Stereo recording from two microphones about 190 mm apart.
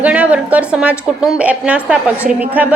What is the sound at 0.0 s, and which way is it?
A woman's voice, 5° right (ahead or behind).